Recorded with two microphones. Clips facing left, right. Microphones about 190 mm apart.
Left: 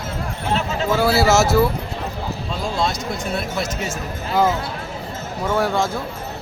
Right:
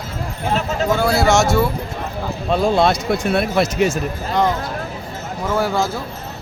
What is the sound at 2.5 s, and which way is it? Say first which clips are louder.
Speech: right 9 dB; 60° right (ahead or behind).